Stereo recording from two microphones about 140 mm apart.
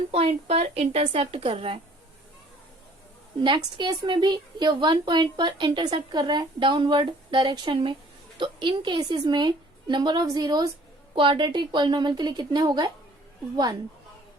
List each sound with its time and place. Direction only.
0.1 s speech: 45° right (ahead or behind)
3.4 s a woman's voice: 35° right (ahead or behind)